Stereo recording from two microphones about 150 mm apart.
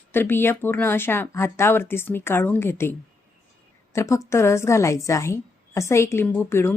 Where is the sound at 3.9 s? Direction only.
20° left (ahead or behind).